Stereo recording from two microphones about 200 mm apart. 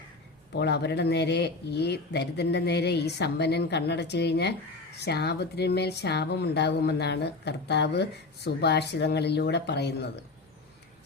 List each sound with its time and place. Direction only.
0.5 s speech: 55° left (ahead or behind)